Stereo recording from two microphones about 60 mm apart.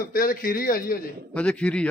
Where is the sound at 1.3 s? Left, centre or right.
Centre.